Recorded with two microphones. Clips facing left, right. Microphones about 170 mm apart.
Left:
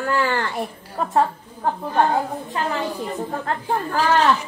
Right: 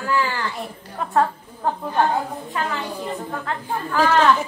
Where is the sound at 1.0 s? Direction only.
35° left (ahead or behind).